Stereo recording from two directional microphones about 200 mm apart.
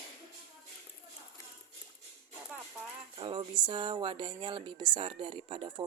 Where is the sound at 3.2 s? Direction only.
25° right (ahead or behind).